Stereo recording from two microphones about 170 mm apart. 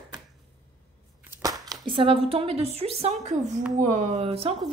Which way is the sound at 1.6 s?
25° right (ahead or behind).